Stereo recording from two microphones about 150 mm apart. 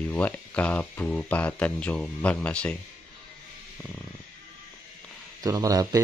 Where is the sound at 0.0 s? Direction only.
10° left (ahead or behind).